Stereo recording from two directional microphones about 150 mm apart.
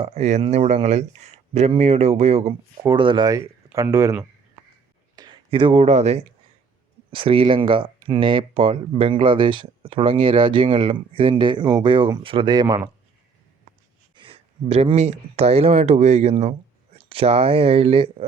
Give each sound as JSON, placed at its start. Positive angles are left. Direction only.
{"t": 0.0, "sound": "speech", "side_deg": -45}
{"t": 2.8, "sound": "speech", "side_deg": -35}
{"t": 5.1, "sound": "speech", "side_deg": -30}
{"t": 14.2, "sound": "speech", "side_deg": -40}